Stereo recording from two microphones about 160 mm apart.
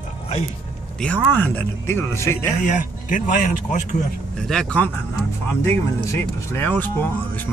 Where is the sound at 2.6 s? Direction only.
55° left (ahead or behind).